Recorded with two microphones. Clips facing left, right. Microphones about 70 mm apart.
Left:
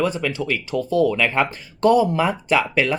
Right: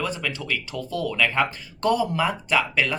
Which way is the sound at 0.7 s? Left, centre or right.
Left.